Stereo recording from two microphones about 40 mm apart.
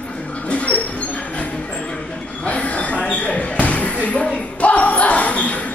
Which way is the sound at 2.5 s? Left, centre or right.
Left.